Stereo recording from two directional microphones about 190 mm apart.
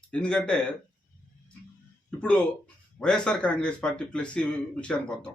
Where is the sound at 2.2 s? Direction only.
5° left (ahead or behind).